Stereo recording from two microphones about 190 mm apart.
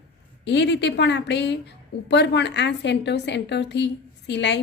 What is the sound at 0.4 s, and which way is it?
A woman's voice, 70° left (ahead or behind).